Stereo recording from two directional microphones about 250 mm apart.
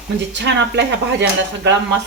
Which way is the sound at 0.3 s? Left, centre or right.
Right.